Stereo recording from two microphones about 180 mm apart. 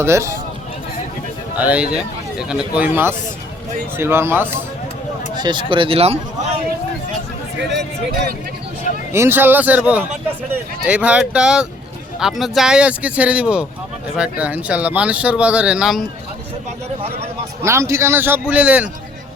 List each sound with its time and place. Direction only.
0.0 s speech: 15° right (ahead or behind)
1.5 s speech: 10° right (ahead or behind)
5.3 s speech: 25° right (ahead or behind)
7.7 s speech: 65° right (ahead or behind)
9.1 s speech: 15° right (ahead or behind)
17.6 s speech: 15° right (ahead or behind)